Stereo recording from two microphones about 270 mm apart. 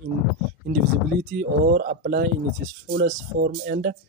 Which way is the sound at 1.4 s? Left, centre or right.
Right.